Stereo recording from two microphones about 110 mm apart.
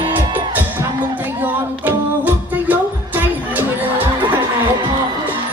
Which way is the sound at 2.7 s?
15° right (ahead or behind).